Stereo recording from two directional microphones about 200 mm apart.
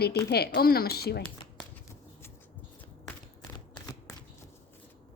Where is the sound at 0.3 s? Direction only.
50° left (ahead or behind).